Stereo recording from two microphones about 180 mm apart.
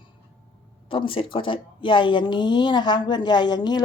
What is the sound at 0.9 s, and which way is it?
A woman's voice, 30° left (ahead or behind).